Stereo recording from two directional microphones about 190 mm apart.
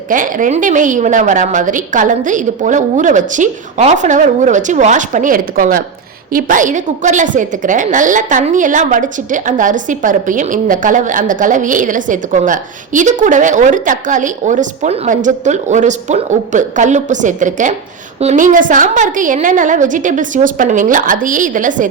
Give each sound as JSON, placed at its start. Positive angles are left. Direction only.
{"t": 0.1, "sound": "a woman's voice", "side_deg": -45}